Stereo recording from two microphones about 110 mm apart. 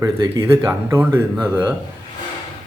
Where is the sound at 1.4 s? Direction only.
10° right (ahead or behind).